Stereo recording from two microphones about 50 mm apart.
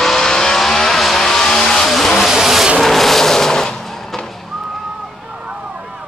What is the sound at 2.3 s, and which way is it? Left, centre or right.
Vehicle, centre.